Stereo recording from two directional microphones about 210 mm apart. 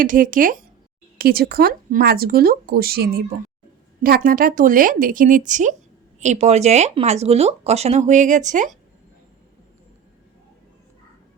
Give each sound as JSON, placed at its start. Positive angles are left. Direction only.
{"t": 0.0, "sound": "speech", "side_deg": -40}